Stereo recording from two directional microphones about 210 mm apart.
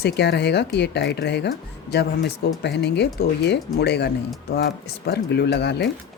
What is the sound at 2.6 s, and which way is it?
Speech, 50° left (ahead or behind).